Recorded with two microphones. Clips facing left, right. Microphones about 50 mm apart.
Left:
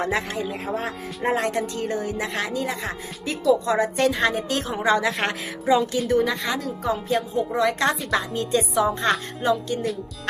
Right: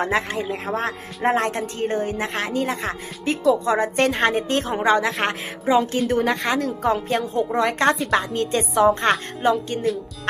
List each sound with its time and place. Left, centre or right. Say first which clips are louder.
0.0 s a woman's voice: right 3 dB; right
0.5 s speech: right 3 dB; right
1.2 s a woman's voice: right 2 dB; right
7.9 s a woman's voice: right 4 dB; centre
8.2 s speech: right 1 dB; right